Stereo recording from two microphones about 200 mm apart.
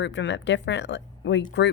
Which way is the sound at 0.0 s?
65° left (ahead or behind).